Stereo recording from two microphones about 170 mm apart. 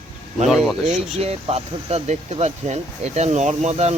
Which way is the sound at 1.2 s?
35° right (ahead or behind).